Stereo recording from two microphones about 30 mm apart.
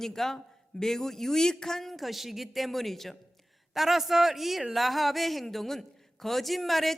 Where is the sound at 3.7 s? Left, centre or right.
Centre.